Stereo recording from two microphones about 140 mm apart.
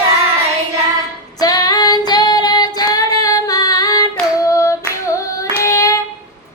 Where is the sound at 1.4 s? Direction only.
25° left (ahead or behind).